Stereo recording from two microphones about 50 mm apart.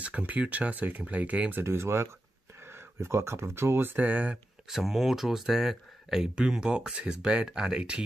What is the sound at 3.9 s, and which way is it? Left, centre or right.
Speech, right.